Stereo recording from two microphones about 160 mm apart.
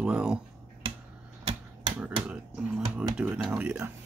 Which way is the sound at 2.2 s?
5° right (ahead or behind).